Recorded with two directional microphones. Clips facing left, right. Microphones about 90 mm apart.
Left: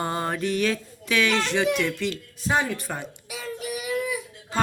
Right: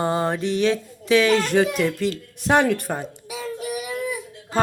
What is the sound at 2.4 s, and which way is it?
Speech, 65° right (ahead or behind).